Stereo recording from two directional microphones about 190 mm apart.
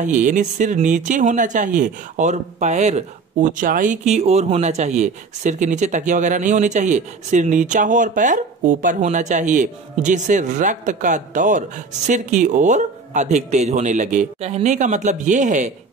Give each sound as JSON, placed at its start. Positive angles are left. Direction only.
{"t": 0.0, "sound": "speech", "side_deg": -40}